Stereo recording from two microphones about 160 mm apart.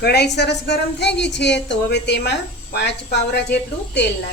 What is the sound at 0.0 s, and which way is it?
A woman's voice, 90° left.